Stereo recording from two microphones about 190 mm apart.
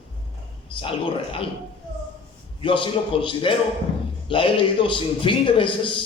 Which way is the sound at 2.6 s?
25° left (ahead or behind).